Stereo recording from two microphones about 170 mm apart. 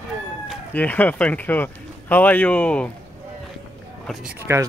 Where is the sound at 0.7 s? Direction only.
10° left (ahead or behind).